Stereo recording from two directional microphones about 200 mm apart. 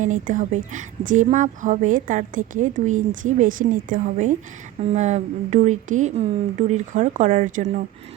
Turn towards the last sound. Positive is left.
turn(degrees=-35)  # may be behind; listen again after turning